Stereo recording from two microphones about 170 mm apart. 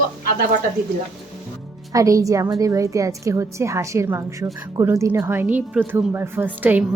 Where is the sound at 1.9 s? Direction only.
20° right (ahead or behind).